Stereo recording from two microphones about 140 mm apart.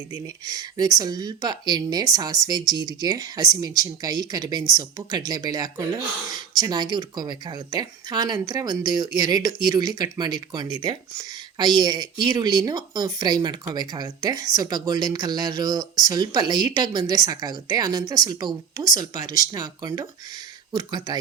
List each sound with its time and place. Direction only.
0.4 s speech: 30° right (ahead or behind)